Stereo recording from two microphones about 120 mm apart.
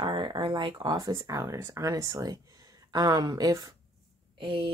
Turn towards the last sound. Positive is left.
turn(degrees=-45)  # may be behind; listen again after turning